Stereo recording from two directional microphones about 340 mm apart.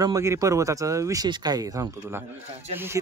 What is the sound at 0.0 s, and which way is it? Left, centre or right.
Speech, centre.